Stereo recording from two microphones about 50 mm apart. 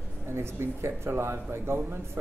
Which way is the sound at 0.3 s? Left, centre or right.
Right.